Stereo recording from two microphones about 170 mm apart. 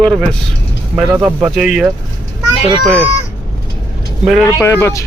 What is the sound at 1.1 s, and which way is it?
Speech, 15° right (ahead or behind).